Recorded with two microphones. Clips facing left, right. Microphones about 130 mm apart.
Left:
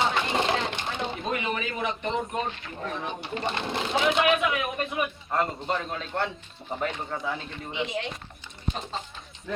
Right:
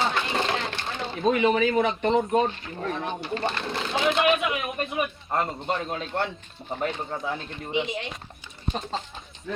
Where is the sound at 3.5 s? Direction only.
20° left (ahead or behind).